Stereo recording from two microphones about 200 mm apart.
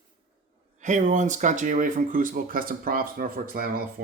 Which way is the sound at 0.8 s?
40° right (ahead or behind).